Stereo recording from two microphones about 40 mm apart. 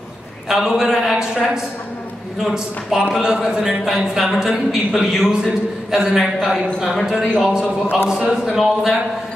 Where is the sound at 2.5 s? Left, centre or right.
Centre.